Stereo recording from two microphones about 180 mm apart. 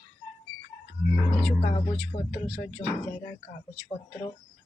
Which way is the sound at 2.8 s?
10° left (ahead or behind).